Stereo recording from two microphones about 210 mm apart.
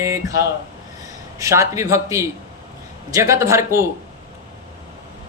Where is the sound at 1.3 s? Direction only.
15° right (ahead or behind).